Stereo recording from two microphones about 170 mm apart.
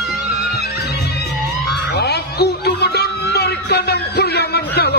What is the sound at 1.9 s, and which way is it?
Music, 70° left (ahead or behind).